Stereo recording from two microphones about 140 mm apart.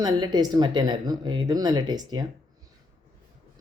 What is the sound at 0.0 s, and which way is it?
Speech, 30° right (ahead or behind).